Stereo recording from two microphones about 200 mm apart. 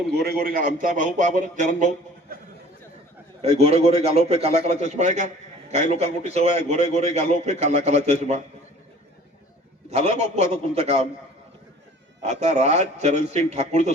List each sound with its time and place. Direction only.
0.1 s a man's voice: 55° right (ahead or behind)
3.4 s a man's voice: 30° right (ahead or behind)
9.9 s a man's voice: 35° right (ahead or behind)
12.2 s a man's voice: 35° right (ahead or behind)